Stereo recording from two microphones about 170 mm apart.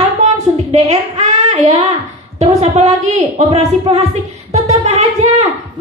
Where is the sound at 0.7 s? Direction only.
35° right (ahead or behind).